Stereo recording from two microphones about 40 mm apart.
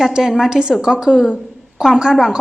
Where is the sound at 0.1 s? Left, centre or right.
Centre.